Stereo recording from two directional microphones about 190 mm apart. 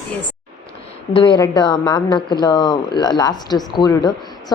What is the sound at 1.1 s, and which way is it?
Speech, 25° left (ahead or behind).